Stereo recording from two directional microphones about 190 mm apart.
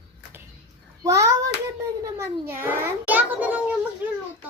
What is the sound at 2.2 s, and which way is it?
Child singing, 10° right (ahead or behind).